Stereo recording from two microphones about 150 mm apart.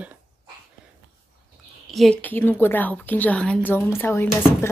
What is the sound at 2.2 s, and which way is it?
A woman's voice, 15° left (ahead or behind).